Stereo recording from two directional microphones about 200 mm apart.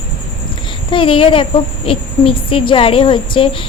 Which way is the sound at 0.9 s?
25° left (ahead or behind).